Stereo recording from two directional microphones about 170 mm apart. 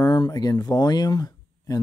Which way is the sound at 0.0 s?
25° left (ahead or behind).